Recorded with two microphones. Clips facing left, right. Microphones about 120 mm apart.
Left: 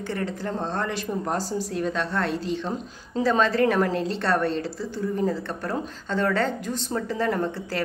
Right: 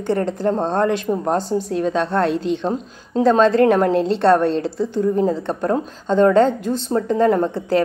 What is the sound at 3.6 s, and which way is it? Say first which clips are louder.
Speech: right 7 dB; 55° right (ahead or behind).